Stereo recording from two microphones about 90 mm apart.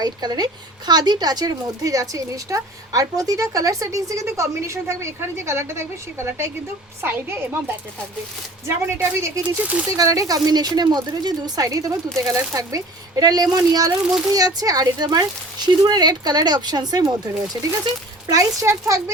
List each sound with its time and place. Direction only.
0.0 s a woman's voice: 50° right (ahead or behind); by 7.6 s 25° right (ahead or behind)
8.6 s a woman's voice: 30° right (ahead or behind)